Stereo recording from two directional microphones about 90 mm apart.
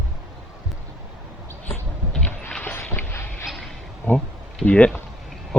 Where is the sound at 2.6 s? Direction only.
25° left (ahead or behind).